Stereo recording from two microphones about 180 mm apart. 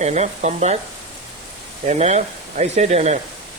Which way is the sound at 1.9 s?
40° right (ahead or behind).